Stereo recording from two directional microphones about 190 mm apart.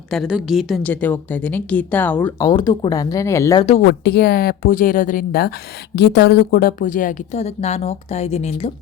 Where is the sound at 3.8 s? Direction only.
60° left (ahead or behind).